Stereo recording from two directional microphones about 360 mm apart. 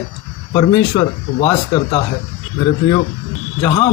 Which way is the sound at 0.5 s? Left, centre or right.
Centre.